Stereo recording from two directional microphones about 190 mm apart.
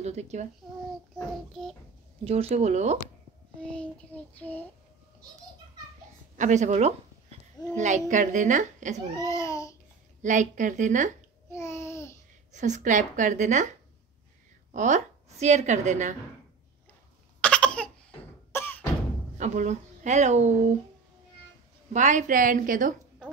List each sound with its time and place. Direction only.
0.0 s speech: 35° right (ahead or behind)
1.1 s child singing: centre (ahead or behind)
2.2 s a child's voice: 30° right (ahead or behind)
3.6 s child singing: 5° left (ahead or behind)
6.3 s a child's voice: 40° right (ahead or behind)
9.2 s child singing: 15° left (ahead or behind)
10.2 s a child's voice: 40° right (ahead or behind)
11.5 s child singing: 15° left (ahead or behind)
12.5 s a child's voice: 40° right (ahead or behind)
14.7 s a woman's voice: 40° right (ahead or behind)
17.4 s cough: 5° left (ahead or behind)
18.5 s a sound: 10° left (ahead or behind)
19.3 s a woman's voice: 40° right (ahead or behind)
21.9 s a woman's voice: 40° right (ahead or behind)